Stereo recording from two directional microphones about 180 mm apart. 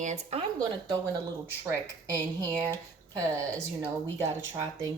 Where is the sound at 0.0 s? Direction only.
40° right (ahead or behind).